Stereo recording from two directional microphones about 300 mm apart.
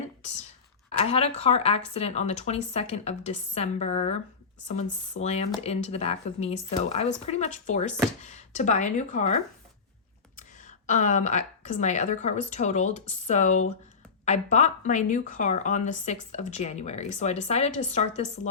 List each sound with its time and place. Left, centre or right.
0.9 s speech: centre
10.8 s speech: left